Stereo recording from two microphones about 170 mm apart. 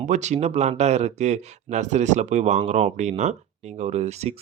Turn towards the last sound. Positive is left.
turn(degrees=-40)  # may be behind; listen again after turning